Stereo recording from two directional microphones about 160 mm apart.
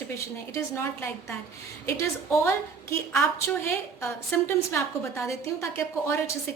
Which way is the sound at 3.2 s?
15° left (ahead or behind).